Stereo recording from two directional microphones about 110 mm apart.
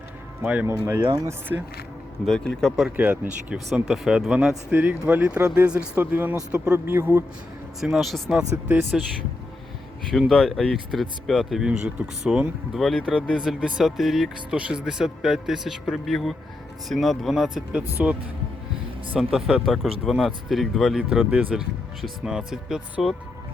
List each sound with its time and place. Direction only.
0.4 s speech: 15° right (ahead or behind)
1.1 s speech: 30° right (ahead or behind)
2.2 s speech: 5° left (ahead or behind)
2.9 s speech: 15° right (ahead or behind)
3.8 s speech: 5° right (ahead or behind)
4.7 s speech: 15° right (ahead or behind)
7.8 s speech: centre (ahead or behind)
8.6 s speech: 15° right (ahead or behind)
10.1 s speech: centre (ahead or behind); by 18.2 s 15° right (ahead or behind)
19.1 s speech: 5° right (ahead or behind)